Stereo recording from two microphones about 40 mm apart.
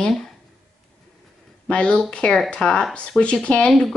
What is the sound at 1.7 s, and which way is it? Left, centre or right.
Speech, left.